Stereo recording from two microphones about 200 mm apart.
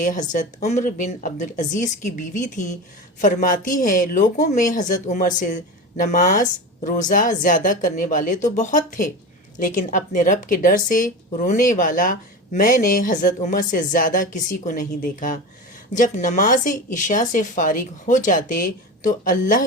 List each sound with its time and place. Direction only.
0.0 s speech: 40° left (ahead or behind)